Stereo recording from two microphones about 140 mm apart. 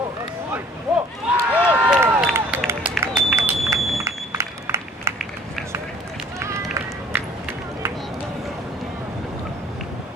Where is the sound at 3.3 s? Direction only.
20° right (ahead or behind).